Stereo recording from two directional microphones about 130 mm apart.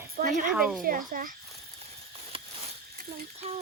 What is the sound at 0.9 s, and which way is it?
Speech, 90° right.